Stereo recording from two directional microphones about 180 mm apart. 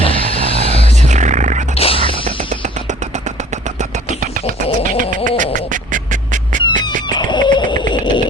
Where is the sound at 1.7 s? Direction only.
30° left (ahead or behind).